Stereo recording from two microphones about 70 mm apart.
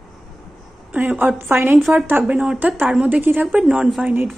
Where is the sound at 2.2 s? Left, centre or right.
Centre.